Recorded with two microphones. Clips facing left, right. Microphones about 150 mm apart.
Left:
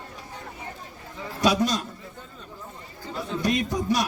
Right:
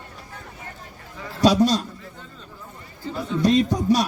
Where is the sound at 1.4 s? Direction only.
35° right (ahead or behind).